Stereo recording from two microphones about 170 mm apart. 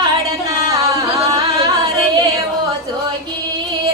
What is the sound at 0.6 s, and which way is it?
Singing, 20° right (ahead or behind).